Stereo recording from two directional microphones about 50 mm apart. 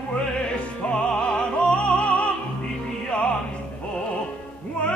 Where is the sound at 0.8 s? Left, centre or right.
Centre.